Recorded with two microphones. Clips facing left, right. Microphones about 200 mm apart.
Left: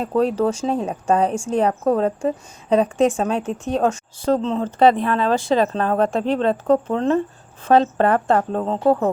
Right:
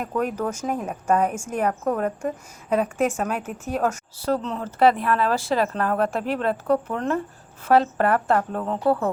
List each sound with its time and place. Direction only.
0.0 s a woman's voice: 30° left (ahead or behind)